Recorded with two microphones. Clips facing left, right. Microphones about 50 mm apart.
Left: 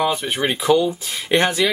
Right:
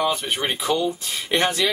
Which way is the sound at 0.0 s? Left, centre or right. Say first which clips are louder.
Left 3 dB; centre.